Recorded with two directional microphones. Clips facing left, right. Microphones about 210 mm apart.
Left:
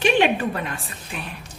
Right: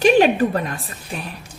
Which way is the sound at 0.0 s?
40° right (ahead or behind).